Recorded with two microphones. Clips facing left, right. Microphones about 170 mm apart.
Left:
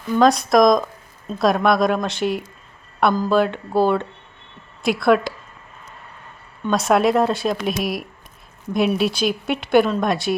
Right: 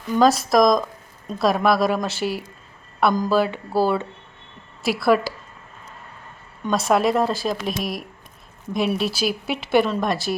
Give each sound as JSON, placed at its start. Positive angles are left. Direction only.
{"t": 0.1, "sound": "a woman's voice", "side_deg": 0}
{"t": 6.7, "sound": "a woman's voice", "side_deg": 0}